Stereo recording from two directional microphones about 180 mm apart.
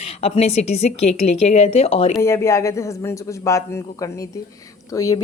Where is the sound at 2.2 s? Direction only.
15° left (ahead or behind).